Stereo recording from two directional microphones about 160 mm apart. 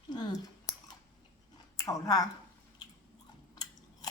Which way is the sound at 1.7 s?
20° left (ahead or behind).